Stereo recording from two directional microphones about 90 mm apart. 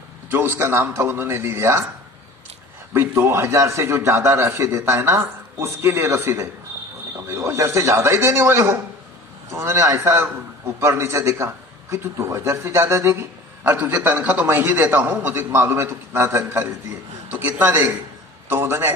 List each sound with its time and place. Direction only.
0.3 s a man's voice: 25° right (ahead or behind)
2.9 s a man's voice: 30° right (ahead or behind)
13.7 s a man's voice: 20° right (ahead or behind)